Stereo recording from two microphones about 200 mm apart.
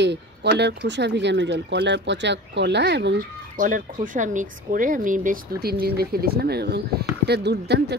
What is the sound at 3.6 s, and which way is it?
Speech, 40° right (ahead or behind).